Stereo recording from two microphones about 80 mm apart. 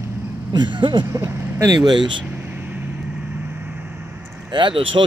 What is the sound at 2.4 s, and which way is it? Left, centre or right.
Vehicle, right.